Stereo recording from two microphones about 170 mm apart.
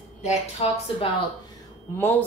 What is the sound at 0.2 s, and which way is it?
Speech, 40° left (ahead or behind).